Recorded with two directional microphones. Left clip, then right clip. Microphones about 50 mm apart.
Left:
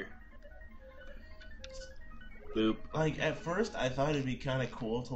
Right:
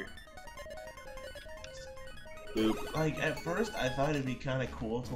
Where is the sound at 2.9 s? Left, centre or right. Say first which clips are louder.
Even; left.